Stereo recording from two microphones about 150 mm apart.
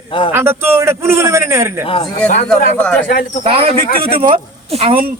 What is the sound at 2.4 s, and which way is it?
Speech, 5° left (ahead or behind).